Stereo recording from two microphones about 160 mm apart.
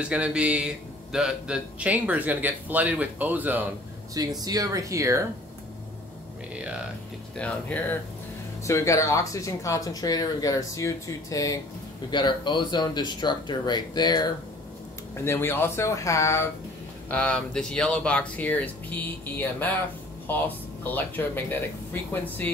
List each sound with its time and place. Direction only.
0.0 s a man's voice: 5° right (ahead or behind)
4.1 s speech: 25° right (ahead or behind)
6.5 s a man's voice: 5° right (ahead or behind)
7.3 s speech: 10° left (ahead or behind)
8.6 s speech: 20° left (ahead or behind)
15.1 s speech: 15° left (ahead or behind)
17.1 s speech: 10° left (ahead or behind)